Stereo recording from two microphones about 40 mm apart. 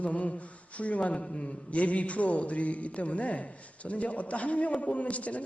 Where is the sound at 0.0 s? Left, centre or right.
Left.